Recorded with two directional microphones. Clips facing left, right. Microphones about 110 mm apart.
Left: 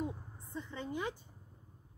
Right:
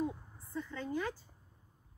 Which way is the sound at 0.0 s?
20° left (ahead or behind).